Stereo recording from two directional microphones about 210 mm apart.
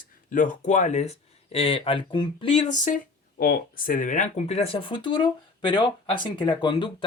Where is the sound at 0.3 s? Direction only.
40° left (ahead or behind).